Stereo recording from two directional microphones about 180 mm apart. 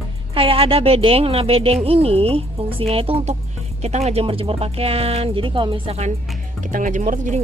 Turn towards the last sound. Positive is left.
turn(degrees=-45)  # may be behind; listen again after turning